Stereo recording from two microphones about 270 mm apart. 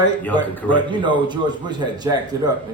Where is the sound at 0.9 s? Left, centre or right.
Centre.